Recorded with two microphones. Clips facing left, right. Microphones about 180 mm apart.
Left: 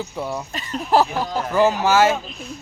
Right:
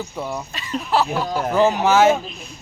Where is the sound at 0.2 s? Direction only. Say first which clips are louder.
Left 1 dB; 10° left (ahead or behind).